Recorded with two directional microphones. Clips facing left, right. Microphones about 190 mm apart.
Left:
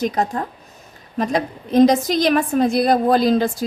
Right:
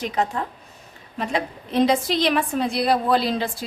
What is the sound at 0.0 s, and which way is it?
A woman's voice, 40° left (ahead or behind).